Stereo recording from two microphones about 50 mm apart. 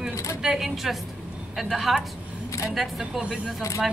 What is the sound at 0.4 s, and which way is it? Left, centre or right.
Speech, centre.